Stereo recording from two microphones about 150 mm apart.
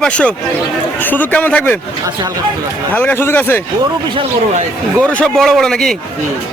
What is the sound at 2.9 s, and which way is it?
Speech, 15° left (ahead or behind).